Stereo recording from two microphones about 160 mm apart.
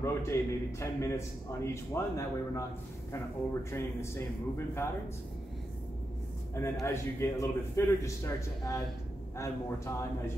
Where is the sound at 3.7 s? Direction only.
15° left (ahead or behind).